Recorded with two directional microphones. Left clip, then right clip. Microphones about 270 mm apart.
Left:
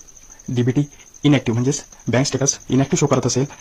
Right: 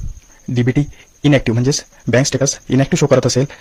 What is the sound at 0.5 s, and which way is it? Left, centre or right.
Speech, right.